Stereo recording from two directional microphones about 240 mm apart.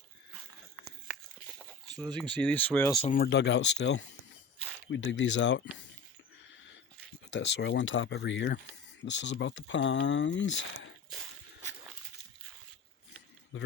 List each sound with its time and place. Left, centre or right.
2.1 s speech: centre
3.1 s speech: left
7.3 s speech: left
13.5 s a man's voice: left